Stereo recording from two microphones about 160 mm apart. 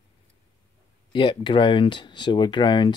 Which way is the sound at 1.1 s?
30° left (ahead or behind).